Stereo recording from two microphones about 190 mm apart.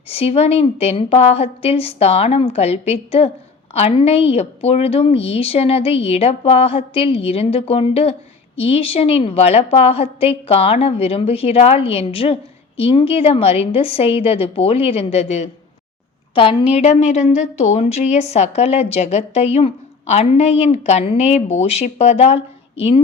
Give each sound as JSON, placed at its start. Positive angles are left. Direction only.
{"t": 0.1, "sound": "a woman's voice", "side_deg": 30}